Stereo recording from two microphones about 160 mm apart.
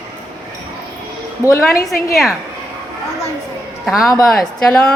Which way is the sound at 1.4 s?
20° left (ahead or behind).